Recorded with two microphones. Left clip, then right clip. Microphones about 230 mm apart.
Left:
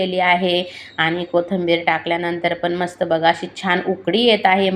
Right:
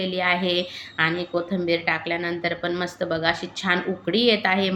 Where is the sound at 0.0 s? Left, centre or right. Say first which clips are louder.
Left 6 dB; centre.